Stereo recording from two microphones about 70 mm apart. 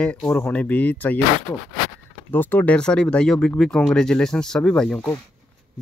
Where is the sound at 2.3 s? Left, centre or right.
Left.